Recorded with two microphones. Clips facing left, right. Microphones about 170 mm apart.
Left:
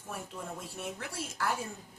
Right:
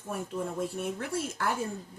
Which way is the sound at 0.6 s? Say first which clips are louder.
Right 7 dB; 50° right (ahead or behind).